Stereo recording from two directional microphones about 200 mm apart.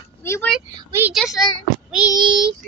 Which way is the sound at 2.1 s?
20° right (ahead or behind).